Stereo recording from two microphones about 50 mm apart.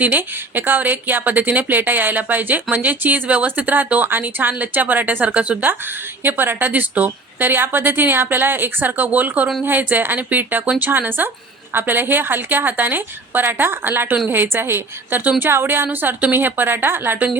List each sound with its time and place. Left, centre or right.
0.0 s a woman's voice: right
6.2 s a woman's voice: right